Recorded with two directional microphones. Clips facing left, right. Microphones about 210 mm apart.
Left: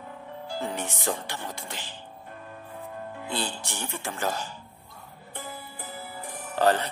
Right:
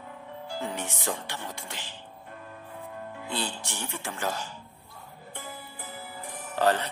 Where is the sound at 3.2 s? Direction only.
35° left (ahead or behind).